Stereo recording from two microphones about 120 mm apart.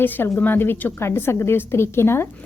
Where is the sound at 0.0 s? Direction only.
15° left (ahead or behind).